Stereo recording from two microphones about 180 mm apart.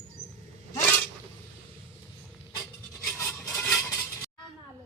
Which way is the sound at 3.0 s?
15° left (ahead or behind).